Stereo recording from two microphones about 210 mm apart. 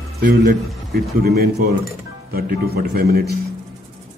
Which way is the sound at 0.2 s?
50° right (ahead or behind).